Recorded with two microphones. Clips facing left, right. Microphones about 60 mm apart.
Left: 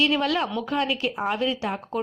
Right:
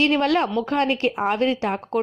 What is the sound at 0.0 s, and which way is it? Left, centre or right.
Speech, right.